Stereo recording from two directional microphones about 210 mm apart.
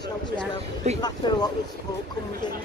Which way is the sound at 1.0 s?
20° left (ahead or behind).